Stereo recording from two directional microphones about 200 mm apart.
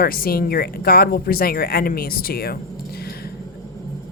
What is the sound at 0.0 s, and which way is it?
Speech, 50° left (ahead or behind).